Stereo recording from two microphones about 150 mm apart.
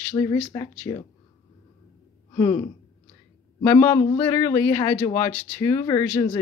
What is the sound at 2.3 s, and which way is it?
A man's voice, 20° left (ahead or behind).